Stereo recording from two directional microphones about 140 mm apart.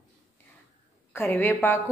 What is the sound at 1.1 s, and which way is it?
Speech, 15° left (ahead or behind).